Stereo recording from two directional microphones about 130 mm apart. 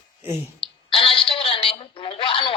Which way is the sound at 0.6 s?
40° left (ahead or behind).